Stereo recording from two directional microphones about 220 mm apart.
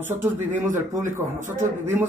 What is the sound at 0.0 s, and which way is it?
A man's voice, 10° right (ahead or behind).